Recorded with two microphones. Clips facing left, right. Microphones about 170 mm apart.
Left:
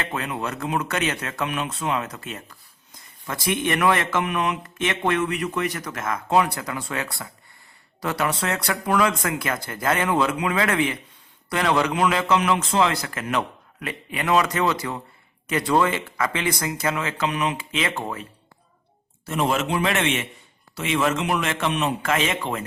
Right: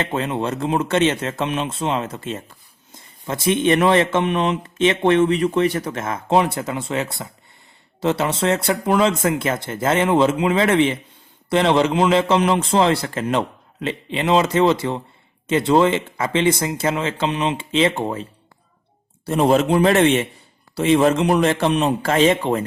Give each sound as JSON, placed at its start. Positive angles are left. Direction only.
{"t": 0.0, "sound": "a man's voice", "side_deg": -25}